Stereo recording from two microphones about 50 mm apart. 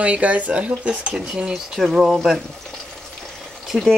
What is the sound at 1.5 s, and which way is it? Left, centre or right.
Speech, centre.